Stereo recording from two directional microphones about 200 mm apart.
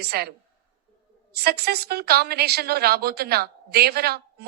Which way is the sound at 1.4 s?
55° right (ahead or behind).